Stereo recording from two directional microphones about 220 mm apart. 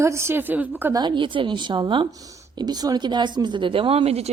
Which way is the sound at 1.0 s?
20° right (ahead or behind).